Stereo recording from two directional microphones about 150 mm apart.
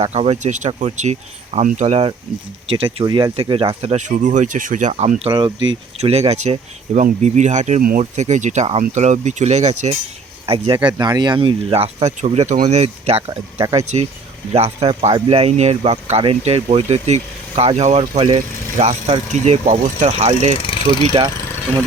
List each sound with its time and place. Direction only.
0.0 s speech: 45° right (ahead or behind)
5.3 s speech: 30° right (ahead or behind)
6.0 s speech: 45° right (ahead or behind)
7.8 s speech: 75° right (ahead or behind)
8.1 s speech: 50° right (ahead or behind)
10.4 s speech: 35° right (ahead or behind)
20.6 s a sound: 35° left (ahead or behind)
21.2 s speech: 30° right (ahead or behind)